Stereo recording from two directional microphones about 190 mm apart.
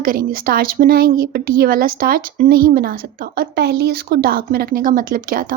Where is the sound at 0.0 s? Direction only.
50° right (ahead or behind).